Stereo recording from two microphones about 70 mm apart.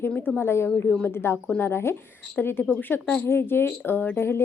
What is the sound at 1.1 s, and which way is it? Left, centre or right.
A woman's voice, left.